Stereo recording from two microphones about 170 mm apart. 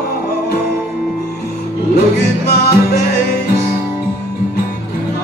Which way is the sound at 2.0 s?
70° left (ahead or behind).